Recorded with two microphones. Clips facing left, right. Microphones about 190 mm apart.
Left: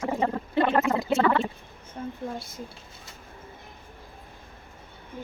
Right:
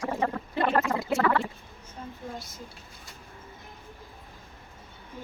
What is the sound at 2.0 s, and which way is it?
Speech, 55° left (ahead or behind).